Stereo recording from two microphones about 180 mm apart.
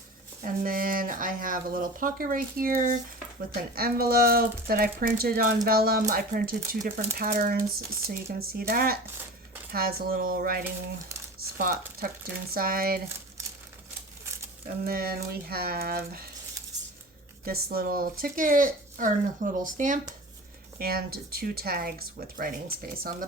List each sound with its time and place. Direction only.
0.4 s speech: 50° right (ahead or behind)
14.8 s speech: 55° right (ahead or behind)
17.4 s speech: 55° right (ahead or behind)
20.7 s speech: 55° right (ahead or behind)